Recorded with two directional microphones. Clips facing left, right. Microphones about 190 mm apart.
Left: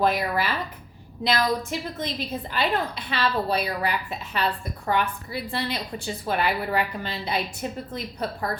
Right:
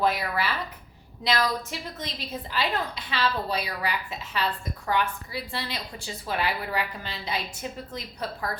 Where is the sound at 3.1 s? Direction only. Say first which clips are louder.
Left 3 dB; 55° left (ahead or behind).